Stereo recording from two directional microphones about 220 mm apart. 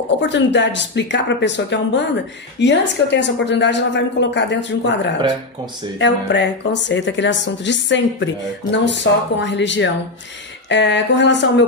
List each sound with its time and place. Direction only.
0.3 s a woman's voice: 55° left (ahead or behind)